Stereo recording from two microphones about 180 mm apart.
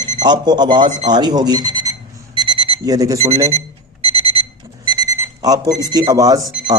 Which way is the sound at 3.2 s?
35° right (ahead or behind).